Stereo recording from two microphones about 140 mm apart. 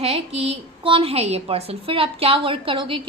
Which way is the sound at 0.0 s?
45° right (ahead or behind).